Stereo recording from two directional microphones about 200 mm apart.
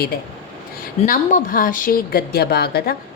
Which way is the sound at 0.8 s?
45° left (ahead or behind).